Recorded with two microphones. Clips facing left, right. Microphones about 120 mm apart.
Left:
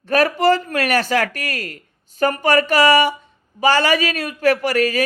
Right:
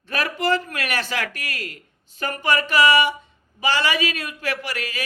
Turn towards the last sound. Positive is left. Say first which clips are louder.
# left 11 dB
turn(degrees=45)  # may be behind; listen again after turning